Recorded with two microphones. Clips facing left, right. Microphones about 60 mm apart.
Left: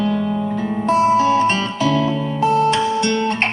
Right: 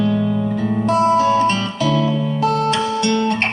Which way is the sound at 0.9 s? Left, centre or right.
Left.